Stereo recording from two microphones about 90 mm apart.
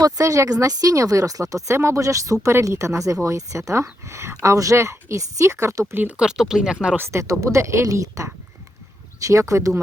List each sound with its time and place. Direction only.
0.0 s speech: 40° right (ahead or behind)
5.9 s speech: 20° right (ahead or behind)
6.1 s speech: 5° right (ahead or behind)
6.9 s speech: 30° right (ahead or behind)